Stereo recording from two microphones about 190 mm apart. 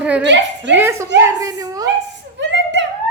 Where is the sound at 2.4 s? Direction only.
70° right (ahead or behind).